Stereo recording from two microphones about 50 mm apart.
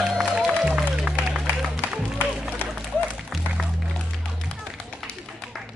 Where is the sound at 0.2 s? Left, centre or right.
Centre.